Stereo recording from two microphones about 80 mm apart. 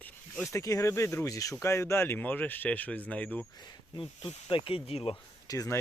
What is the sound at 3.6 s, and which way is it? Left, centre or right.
Speech, left.